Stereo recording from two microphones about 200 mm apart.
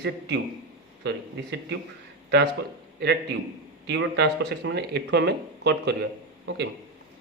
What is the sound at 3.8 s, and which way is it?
Speech, 55° right (ahead or behind).